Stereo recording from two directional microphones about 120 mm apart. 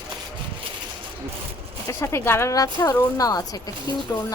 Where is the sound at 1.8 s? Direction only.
25° left (ahead or behind).